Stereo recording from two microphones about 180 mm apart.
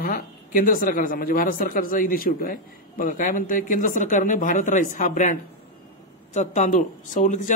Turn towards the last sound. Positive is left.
turn(degrees=45)  # may be behind; listen again after turning